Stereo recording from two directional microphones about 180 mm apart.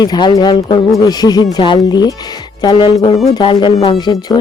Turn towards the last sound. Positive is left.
turn(degrees=20)  # may be behind; listen again after turning